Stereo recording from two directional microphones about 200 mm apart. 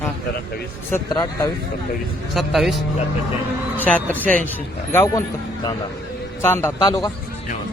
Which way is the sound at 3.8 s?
10° left (ahead or behind).